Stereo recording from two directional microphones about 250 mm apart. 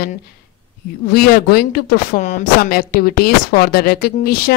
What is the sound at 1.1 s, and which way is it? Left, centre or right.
Speech, left.